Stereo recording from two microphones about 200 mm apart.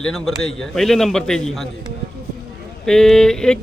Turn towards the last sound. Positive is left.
turn(degrees=5)  # may be behind; listen again after turning